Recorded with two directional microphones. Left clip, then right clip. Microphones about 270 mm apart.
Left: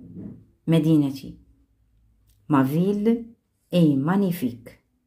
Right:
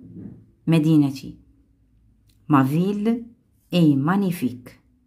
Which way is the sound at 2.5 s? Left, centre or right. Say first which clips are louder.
Right 2 dB; centre.